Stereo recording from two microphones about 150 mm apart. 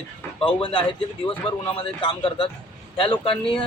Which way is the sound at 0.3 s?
35° left (ahead or behind).